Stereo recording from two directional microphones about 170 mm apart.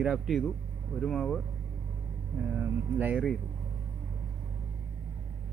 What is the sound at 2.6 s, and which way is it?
Speech, 10° right (ahead or behind).